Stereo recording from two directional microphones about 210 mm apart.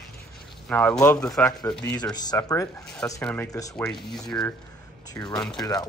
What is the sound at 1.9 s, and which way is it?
Speech, 20° left (ahead or behind).